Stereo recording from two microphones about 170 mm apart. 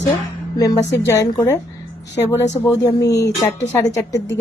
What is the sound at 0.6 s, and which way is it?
A woman's voice, 20° left (ahead or behind).